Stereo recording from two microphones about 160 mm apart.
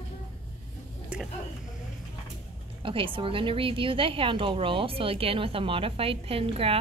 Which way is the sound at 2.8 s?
30° right (ahead or behind).